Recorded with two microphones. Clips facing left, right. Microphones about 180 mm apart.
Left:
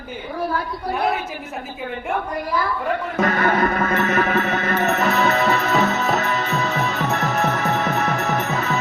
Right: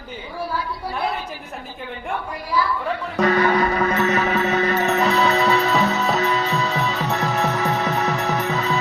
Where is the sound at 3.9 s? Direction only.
50° left (ahead or behind).